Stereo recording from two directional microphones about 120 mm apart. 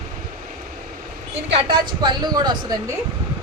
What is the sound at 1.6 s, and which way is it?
Speech, 45° right (ahead or behind).